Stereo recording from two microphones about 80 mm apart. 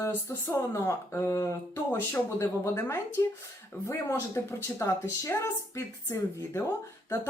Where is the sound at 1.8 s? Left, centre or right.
Centre.